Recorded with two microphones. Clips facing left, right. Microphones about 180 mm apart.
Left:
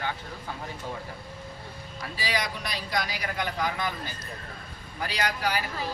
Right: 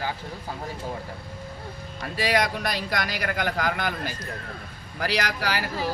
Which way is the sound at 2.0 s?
55° right (ahead or behind).